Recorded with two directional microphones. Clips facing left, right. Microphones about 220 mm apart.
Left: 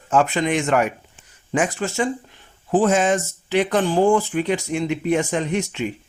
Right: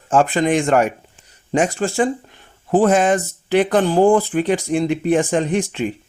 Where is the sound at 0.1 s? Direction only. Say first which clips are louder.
Right 3 dB; 45° right (ahead or behind).